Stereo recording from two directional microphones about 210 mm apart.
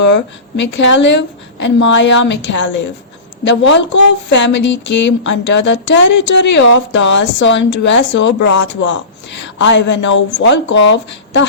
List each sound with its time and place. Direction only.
0.1 s speech: 55° left (ahead or behind)